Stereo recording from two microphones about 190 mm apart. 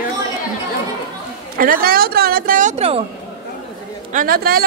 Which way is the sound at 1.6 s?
50° right (ahead or behind).